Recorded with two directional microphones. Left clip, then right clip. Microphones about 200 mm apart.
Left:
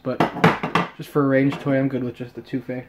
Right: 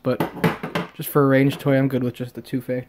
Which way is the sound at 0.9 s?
40° right (ahead or behind).